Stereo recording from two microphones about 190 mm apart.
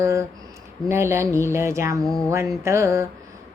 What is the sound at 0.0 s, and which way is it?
A woman's voice, 15° right (ahead or behind).